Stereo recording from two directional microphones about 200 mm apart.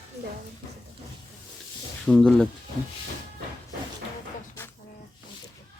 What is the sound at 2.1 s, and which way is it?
Speech, 5° left (ahead or behind).